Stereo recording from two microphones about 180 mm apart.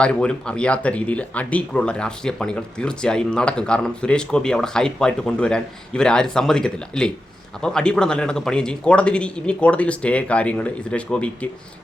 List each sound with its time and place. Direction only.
0.0 s a man's voice: 5° left (ahead or behind)